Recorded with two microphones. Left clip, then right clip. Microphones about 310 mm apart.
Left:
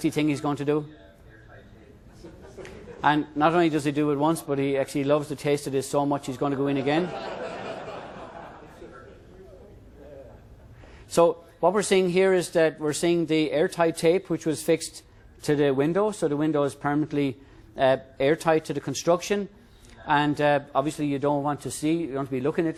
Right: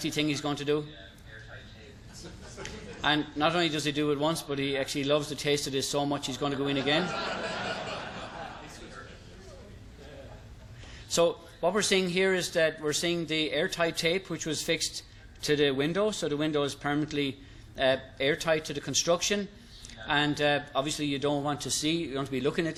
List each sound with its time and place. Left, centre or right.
0.0 s speech: left
2.6 s speech: left
11.1 s a man's voice: left